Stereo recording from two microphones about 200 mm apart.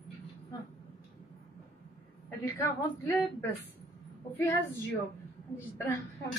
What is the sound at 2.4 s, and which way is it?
Speech, 10° left (ahead or behind).